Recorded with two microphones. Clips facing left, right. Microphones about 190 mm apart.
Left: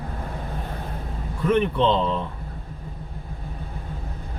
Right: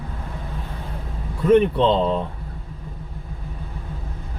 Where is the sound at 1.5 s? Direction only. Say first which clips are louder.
Right 5 dB; 40° right (ahead or behind).